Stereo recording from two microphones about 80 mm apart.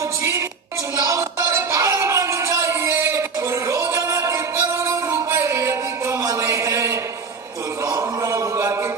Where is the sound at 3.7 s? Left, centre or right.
Right.